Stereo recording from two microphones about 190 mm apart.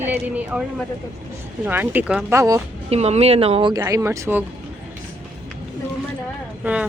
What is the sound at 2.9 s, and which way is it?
Speech, 35° right (ahead or behind).